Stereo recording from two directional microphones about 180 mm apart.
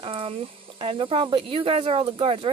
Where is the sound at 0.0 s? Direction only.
30° right (ahead or behind).